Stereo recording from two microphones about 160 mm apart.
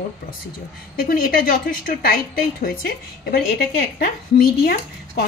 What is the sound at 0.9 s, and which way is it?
A woman's voice, 65° left (ahead or behind).